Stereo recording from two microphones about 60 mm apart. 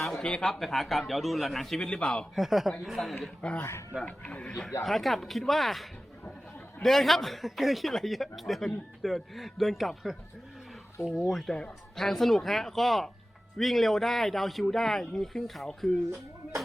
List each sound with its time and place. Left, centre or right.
0.2 s a man's voice: centre
0.4 s speech: centre
1.8 s a man's voice: centre
2.3 s speech: centre
3.6 s speech: left
4.0 s a man's voice: left
4.8 s speech: centre
11.2 s speech: centre